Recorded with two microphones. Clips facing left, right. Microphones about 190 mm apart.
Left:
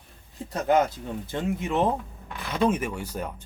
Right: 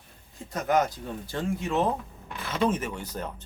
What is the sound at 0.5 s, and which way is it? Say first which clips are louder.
Speech: left 3 dB; 30° left (ahead or behind).